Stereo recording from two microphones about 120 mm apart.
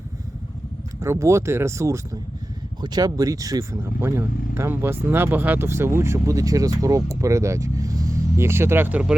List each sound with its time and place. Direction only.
0.9 s speech: 25° right (ahead or behind)
2.8 s speech: 35° right (ahead or behind); by 9.1 s 10° right (ahead or behind)